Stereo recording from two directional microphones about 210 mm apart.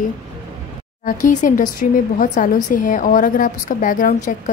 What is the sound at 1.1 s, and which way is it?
A woman's voice, 40° left (ahead or behind).